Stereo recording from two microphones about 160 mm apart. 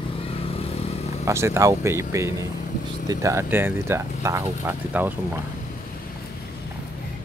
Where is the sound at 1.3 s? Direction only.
15° right (ahead or behind).